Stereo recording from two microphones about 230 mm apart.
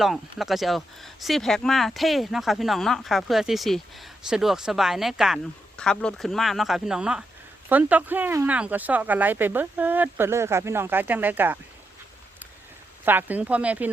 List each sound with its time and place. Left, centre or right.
0.0 s speech: centre
13.1 s speech: centre